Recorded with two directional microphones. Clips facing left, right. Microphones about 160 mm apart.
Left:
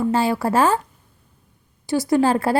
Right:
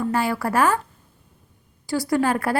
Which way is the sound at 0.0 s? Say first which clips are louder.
Left 3 dB; 25° left (ahead or behind).